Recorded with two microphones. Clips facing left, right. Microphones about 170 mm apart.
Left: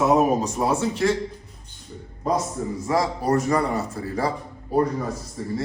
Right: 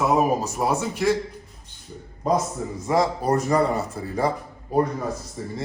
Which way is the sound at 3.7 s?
Centre (ahead or behind).